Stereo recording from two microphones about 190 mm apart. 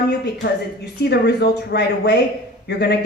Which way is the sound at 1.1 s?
60° left (ahead or behind).